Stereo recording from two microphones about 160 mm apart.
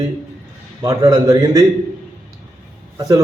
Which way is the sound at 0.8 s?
25° right (ahead or behind).